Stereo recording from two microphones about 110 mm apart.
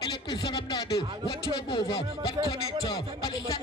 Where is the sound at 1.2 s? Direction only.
50° left (ahead or behind).